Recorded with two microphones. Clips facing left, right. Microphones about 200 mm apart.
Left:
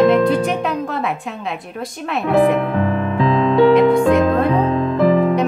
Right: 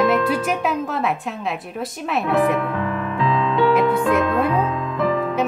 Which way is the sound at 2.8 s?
40° left (ahead or behind).